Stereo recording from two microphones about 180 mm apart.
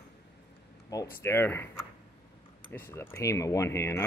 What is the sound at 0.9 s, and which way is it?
Speech, 15° left (ahead or behind).